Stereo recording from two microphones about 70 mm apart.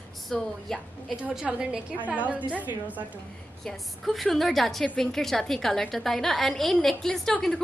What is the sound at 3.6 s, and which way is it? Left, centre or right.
A woman's voice, centre.